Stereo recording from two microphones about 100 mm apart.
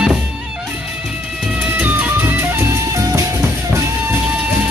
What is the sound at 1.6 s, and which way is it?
Music, 15° right (ahead or behind).